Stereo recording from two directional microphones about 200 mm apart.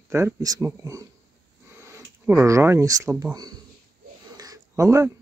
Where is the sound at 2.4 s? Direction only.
15° right (ahead or behind).